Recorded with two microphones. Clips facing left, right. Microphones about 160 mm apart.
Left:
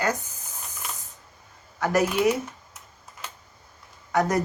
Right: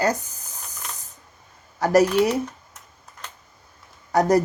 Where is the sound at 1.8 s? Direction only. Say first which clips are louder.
Right 6 dB; 40° right (ahead or behind).